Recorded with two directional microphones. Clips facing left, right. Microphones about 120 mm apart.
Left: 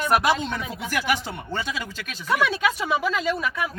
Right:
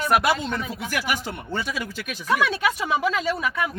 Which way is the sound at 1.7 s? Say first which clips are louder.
Right 2 dB; 10° right (ahead or behind).